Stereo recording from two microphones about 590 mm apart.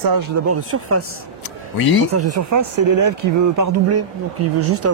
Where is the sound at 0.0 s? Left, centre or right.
Right.